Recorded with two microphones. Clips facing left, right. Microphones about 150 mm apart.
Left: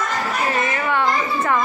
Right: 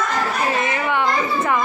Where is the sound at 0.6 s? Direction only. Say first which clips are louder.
Even; 20° right (ahead or behind).